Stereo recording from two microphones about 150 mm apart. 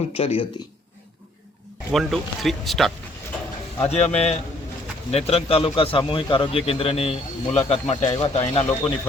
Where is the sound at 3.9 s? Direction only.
45° left (ahead or behind).